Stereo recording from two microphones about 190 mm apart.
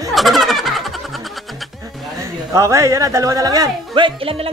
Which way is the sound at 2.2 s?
15° right (ahead or behind).